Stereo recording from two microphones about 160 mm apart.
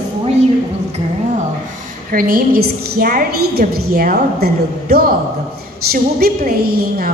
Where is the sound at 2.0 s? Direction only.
60° right (ahead or behind).